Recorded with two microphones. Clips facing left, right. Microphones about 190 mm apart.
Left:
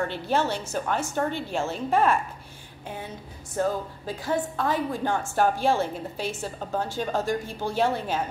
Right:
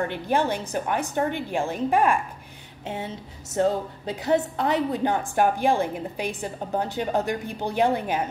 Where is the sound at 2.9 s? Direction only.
25° right (ahead or behind).